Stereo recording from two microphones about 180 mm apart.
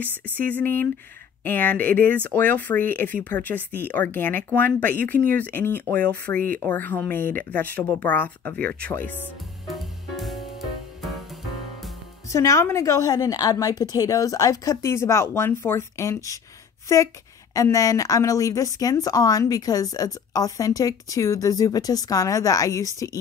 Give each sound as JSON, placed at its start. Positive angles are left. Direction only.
{"t": 0.5, "sound": "a woman's voice", "side_deg": 10}
{"t": 9.7, "sound": "music", "side_deg": 0}
{"t": 12.3, "sound": "a woman's voice", "side_deg": 15}
{"t": 17.6, "sound": "speech", "side_deg": 20}